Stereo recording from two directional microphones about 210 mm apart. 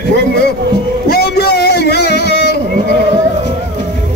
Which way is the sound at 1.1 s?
50° left (ahead or behind).